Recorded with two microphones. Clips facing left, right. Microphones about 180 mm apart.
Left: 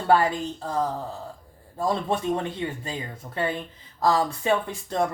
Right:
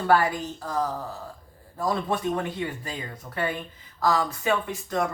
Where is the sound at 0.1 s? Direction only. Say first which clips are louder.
Left 2 dB; 25° left (ahead or behind).